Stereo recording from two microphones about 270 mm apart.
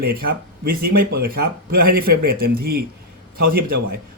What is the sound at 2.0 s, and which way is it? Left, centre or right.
Speech, right.